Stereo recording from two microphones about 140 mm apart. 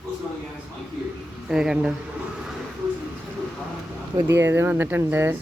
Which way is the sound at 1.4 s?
5° right (ahead or behind).